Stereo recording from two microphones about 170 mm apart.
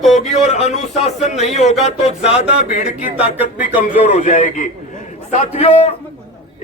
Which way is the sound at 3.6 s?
50° left (ahead or behind).